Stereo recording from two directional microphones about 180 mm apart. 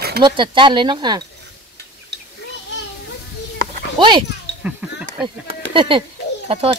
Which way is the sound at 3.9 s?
25° right (ahead or behind).